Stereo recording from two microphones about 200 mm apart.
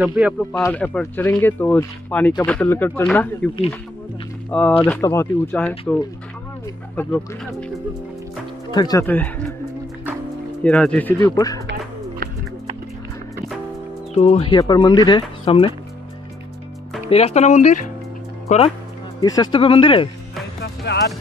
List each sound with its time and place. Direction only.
0.0 s speech: 5° right (ahead or behind)
0.6 s speech: 10° left (ahead or behind)
4.5 s speech: 5° left (ahead or behind)
8.7 s speech: 20° left (ahead or behind)
9.0 s speech: 10° left (ahead or behind)
10.6 s speech: 5° left (ahead or behind)
11.3 s speech: 15° left (ahead or behind)
14.1 s speech: 30° left (ahead or behind)
17.1 s speech: 30° left (ahead or behind)
19.2 s speech: 20° left (ahead or behind)
20.6 s speech: 55° left (ahead or behind)